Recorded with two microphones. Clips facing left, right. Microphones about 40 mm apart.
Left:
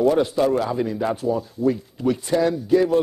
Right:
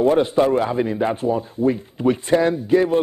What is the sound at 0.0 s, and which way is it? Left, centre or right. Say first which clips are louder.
A man's voice: right 2 dB; right.